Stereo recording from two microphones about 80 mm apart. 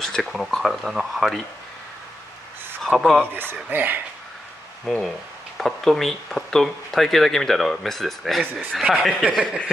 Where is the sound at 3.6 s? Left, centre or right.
Right.